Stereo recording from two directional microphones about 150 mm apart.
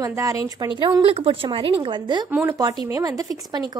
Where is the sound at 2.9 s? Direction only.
25° right (ahead or behind).